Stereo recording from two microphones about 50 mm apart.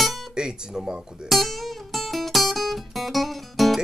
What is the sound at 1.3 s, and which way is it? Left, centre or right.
Music, centre.